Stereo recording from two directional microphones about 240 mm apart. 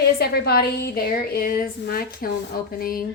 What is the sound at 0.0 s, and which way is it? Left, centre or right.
A woman's voice, left.